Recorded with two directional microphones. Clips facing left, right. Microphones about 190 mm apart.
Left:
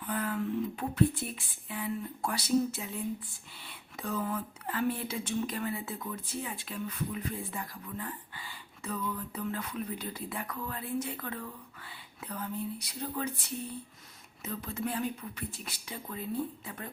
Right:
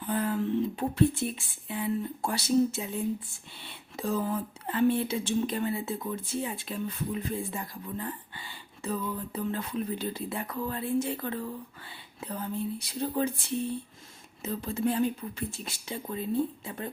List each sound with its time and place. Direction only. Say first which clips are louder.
0.0 s a sound: right 4 dB; 30° right (ahead or behind)
3.6 s speech: right 6 dB; 25° right (ahead or behind)
14.4 s speech: right 6 dB; 30° right (ahead or behind)